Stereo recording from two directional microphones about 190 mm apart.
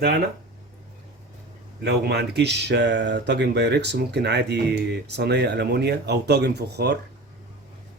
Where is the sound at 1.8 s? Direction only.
60° right (ahead or behind).